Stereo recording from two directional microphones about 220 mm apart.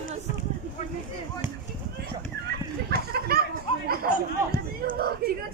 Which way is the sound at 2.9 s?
45° right (ahead or behind).